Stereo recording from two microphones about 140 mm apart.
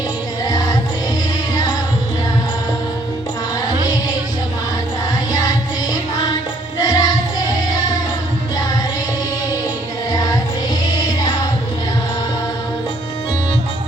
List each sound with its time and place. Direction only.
0.4 s music: 25° left (ahead or behind)
5.3 s music: 25° left (ahead or behind)
6.7 s music: 25° left (ahead or behind)
10.1 s music: 25° left (ahead or behind)